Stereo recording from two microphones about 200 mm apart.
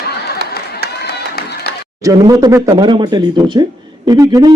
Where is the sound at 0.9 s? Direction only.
55° left (ahead or behind).